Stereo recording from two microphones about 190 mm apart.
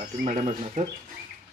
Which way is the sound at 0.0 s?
40° right (ahead or behind).